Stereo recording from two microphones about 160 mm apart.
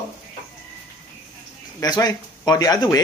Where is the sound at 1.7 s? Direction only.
25° left (ahead or behind).